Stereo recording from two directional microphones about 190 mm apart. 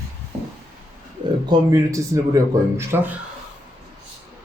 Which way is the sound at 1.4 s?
20° right (ahead or behind).